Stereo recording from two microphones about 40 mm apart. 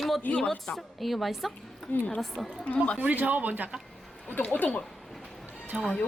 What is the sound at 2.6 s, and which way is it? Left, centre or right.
Speech, left.